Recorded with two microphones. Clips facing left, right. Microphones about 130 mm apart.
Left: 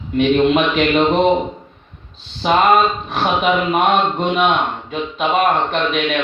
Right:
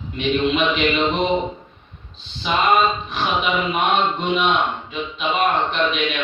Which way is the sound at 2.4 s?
50° left (ahead or behind).